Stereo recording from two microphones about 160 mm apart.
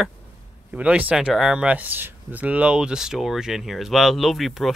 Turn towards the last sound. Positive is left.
turn(degrees=0)  # may be behind; listen again after turning